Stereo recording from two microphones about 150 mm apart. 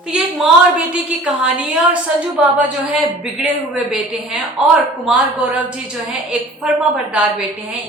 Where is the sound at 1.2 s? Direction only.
5° right (ahead or behind).